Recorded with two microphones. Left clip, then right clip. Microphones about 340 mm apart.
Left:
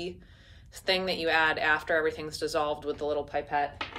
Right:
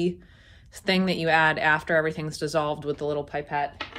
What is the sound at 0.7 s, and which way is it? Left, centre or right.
Speech, centre.